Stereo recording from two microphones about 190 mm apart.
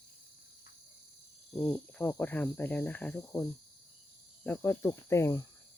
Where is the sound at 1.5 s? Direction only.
5° left (ahead or behind).